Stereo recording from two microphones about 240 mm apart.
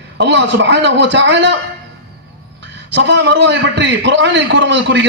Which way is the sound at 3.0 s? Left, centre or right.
Right.